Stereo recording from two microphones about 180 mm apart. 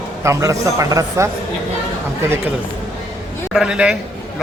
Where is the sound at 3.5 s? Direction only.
5° right (ahead or behind).